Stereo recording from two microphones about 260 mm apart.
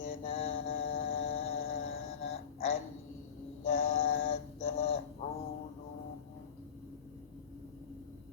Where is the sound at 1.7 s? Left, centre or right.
Left.